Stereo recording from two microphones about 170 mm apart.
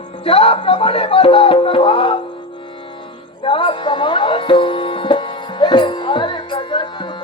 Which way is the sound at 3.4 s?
30° left (ahead or behind).